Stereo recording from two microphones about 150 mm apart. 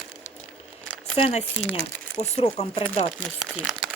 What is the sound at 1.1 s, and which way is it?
Speech, 40° left (ahead or behind).